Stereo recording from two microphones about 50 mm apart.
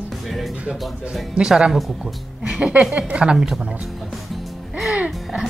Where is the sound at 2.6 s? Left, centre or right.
Right.